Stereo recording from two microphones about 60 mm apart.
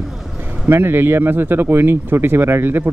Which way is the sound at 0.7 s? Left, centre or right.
Right.